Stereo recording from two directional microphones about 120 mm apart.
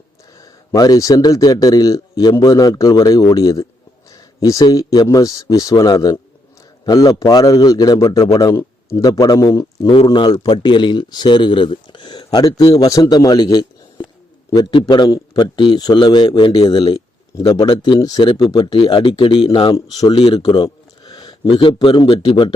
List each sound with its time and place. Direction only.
0.3 s a man's voice: 30° left (ahead or behind)
9.9 s a man's voice: 45° left (ahead or behind)
19.7 s speech: 30° left (ahead or behind)
20.1 s a man's voice: 50° left (ahead or behind)
20.4 s speech: 35° left (ahead or behind)